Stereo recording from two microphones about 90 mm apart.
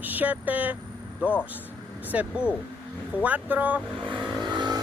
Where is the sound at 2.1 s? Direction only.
15° right (ahead or behind).